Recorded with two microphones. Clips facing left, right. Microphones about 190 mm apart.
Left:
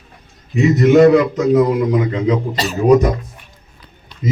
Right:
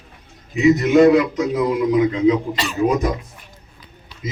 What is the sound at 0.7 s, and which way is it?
A man's voice, 45° left (ahead or behind).